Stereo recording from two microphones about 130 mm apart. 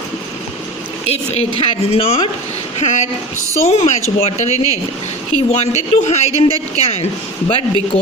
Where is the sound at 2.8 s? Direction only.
65° left (ahead or behind).